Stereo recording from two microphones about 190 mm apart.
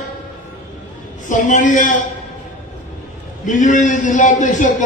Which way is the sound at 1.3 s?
40° left (ahead or behind).